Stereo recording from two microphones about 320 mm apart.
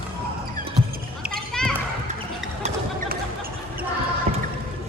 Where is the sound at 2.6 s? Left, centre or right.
Right.